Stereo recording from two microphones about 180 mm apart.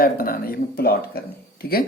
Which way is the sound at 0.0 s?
55° left (ahead or behind).